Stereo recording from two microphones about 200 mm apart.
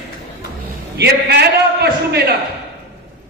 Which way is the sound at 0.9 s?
55° right (ahead or behind).